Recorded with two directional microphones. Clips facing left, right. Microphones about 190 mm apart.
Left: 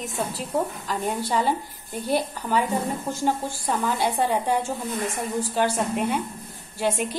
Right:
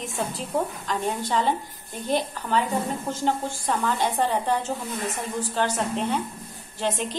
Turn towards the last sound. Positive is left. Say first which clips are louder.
# left 2 dB
turn(degrees=10)  # may be behind; listen again after turning